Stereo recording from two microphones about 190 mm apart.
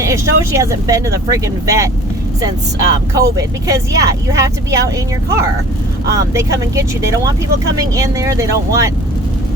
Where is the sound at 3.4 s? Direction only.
15° right (ahead or behind).